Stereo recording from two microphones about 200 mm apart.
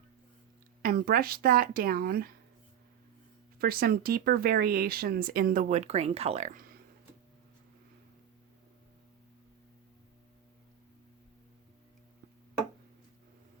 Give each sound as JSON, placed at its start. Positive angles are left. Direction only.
{"t": 0.8, "sound": "speech", "side_deg": -50}
{"t": 3.6, "sound": "speech", "side_deg": -50}